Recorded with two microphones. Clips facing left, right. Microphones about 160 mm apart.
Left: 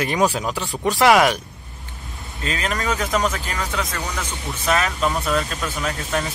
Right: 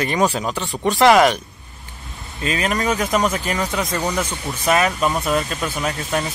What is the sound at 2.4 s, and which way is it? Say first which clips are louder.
Speech: right 4 dB; 10° right (ahead or behind).